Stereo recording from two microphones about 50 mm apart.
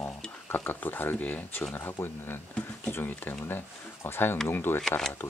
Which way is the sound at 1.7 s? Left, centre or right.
Left.